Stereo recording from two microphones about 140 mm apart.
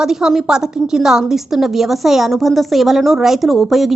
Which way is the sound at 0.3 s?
5° right (ahead or behind).